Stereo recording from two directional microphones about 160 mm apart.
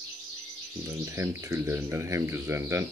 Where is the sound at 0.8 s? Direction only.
20° right (ahead or behind).